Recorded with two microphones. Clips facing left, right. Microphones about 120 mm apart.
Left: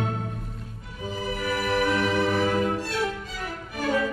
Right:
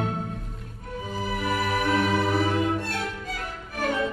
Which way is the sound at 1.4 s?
25° right (ahead or behind).